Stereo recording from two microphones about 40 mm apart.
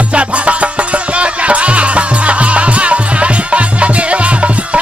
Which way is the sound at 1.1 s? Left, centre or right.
Right.